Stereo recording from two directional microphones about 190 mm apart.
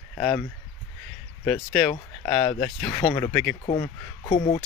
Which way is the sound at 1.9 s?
25° left (ahead or behind).